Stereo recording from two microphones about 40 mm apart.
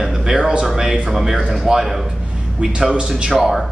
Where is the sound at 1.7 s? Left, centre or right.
Centre.